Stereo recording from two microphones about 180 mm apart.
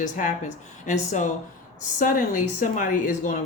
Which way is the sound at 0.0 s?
45° left (ahead or behind).